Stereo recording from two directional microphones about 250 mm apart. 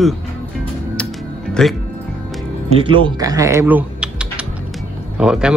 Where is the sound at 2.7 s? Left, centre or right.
Centre.